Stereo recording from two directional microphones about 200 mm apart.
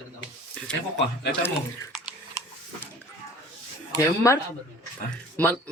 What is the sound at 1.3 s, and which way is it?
Drip, 10° left (ahead or behind).